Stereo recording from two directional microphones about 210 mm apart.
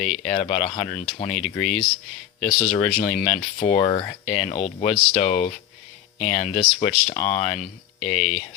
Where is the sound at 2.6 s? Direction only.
25° left (ahead or behind).